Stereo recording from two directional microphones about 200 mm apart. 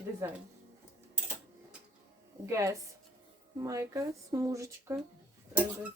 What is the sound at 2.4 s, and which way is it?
Speech, 15° right (ahead or behind).